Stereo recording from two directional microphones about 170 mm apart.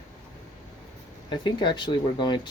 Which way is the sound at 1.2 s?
30° left (ahead or behind).